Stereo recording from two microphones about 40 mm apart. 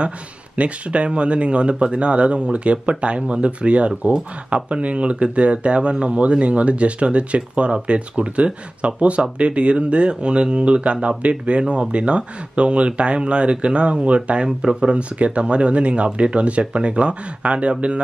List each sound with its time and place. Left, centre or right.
0.6 s speech: right